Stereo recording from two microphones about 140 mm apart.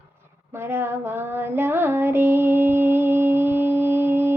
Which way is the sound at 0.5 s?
15° right (ahead or behind).